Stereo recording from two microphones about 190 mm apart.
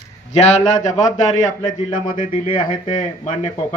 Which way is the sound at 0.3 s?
35° left (ahead or behind).